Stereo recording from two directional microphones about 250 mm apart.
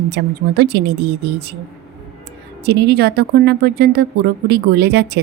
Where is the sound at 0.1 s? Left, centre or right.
Right.